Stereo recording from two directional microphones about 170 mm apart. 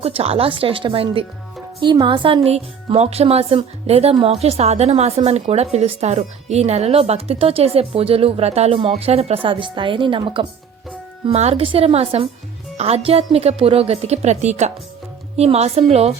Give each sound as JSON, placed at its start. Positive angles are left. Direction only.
{"t": 0.0, "sound": "speech", "side_deg": -35}